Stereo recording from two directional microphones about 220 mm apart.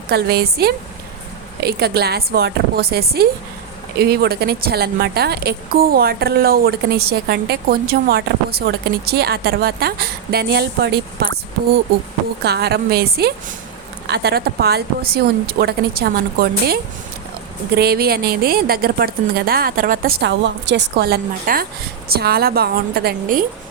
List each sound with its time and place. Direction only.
0.1 s a woman's voice: 45° right (ahead or behind)
12.4 s a woman's voice: 45° right (ahead or behind)